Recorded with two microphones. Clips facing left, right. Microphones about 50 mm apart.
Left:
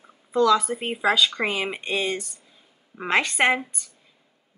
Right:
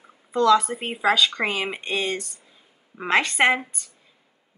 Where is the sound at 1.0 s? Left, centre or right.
Right.